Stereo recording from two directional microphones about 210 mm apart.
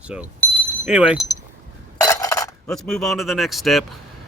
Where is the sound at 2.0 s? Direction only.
15° left (ahead or behind).